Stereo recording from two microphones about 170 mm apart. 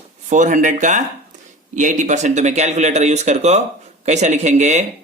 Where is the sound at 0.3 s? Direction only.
45° right (ahead or behind).